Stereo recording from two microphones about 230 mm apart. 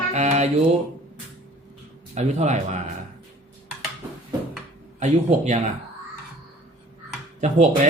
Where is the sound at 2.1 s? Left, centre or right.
Right.